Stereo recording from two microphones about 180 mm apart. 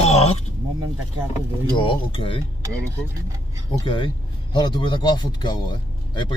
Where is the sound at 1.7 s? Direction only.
30° left (ahead or behind).